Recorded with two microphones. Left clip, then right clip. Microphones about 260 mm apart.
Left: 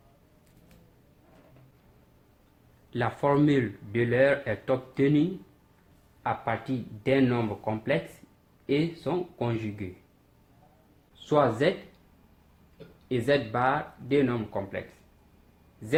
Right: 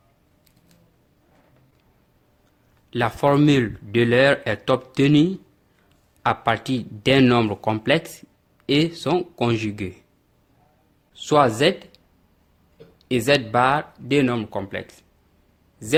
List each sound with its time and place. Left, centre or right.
2.9 s speech: right
6.2 s speech: right
11.3 s speech: right
13.1 s speech: right